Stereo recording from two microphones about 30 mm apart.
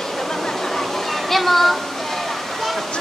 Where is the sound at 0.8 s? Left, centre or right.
Centre.